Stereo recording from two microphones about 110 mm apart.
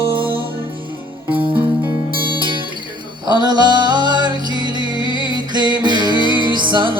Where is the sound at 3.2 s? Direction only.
40° right (ahead or behind).